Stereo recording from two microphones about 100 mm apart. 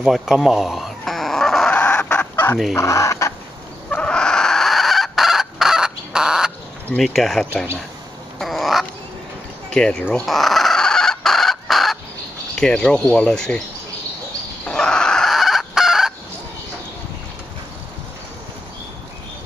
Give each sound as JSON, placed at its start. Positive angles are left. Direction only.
{"t": 0.0, "sound": "fowl", "side_deg": 0}
{"t": 2.7, "sound": "chicken", "side_deg": 30}
{"t": 3.9, "sound": "chicken", "side_deg": 10}
{"t": 7.0, "sound": "speech", "side_deg": 0}
{"t": 8.4, "sound": "cat", "side_deg": 0}
{"t": 9.8, "sound": "speech", "side_deg": 5}
{"t": 10.2, "sound": "fowl", "side_deg": 0}
{"t": 12.5, "sound": "speech", "side_deg": 10}
{"t": 14.7, "sound": "fowl", "side_deg": 10}